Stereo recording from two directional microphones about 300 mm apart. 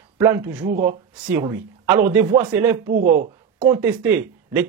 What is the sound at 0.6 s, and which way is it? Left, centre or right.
Speech, right.